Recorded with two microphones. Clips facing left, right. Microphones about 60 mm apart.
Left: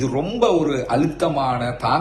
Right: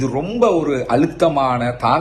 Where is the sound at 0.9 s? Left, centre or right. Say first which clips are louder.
Right 6 dB; right.